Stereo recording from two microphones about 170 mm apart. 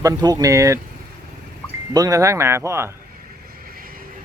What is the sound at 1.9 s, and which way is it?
Speech, 20° right (ahead or behind).